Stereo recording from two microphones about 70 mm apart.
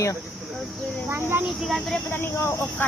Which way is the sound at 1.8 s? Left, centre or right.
Centre.